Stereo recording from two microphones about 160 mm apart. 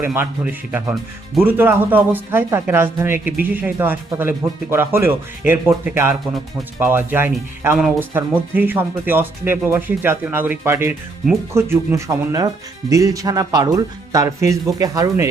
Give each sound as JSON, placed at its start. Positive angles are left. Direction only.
{"t": 0.0, "sound": "speech", "side_deg": -15}